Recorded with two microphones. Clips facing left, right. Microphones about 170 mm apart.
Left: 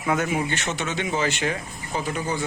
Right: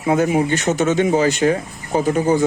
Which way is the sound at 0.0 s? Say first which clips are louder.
Right 8 dB; 30° right (ahead or behind).